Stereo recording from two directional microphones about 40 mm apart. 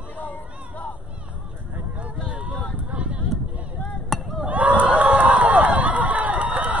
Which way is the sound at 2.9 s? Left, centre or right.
Right.